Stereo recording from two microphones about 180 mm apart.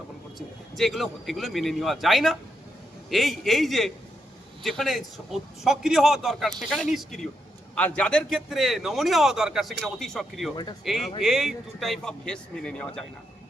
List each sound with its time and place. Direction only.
0.3 s a man's voice: centre (ahead or behind)
10.5 s speech: 25° left (ahead or behind)
10.8 s a man's voice: centre (ahead or behind)